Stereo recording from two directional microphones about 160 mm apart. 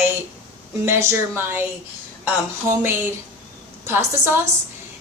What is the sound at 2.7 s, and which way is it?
A woman's voice, 15° right (ahead or behind).